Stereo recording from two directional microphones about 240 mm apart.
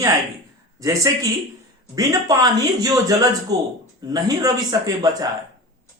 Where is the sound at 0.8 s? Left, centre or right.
Centre.